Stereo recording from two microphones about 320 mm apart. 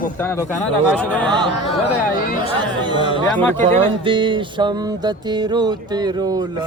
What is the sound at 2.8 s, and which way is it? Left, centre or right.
Mantra, centre.